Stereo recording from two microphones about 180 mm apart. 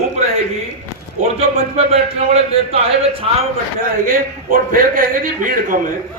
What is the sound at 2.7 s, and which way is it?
Speech, 35° right (ahead or behind).